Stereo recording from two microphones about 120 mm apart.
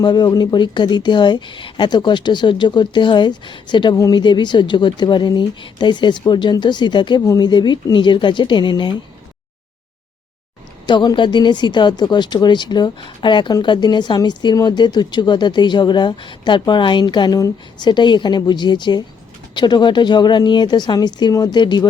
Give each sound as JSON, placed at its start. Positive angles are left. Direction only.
{"t": 0.0, "sound": "speech", "side_deg": 40}
{"t": 10.8, "sound": "speech", "side_deg": 40}